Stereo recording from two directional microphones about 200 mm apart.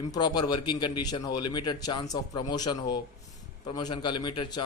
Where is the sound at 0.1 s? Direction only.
20° left (ahead or behind).